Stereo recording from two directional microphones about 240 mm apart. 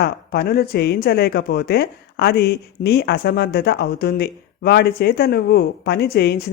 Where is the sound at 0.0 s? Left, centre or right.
Left.